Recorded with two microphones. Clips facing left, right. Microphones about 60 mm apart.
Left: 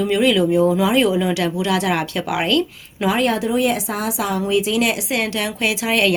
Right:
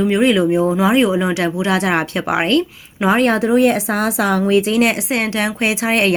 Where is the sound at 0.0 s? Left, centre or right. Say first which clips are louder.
Right 2 dB; right.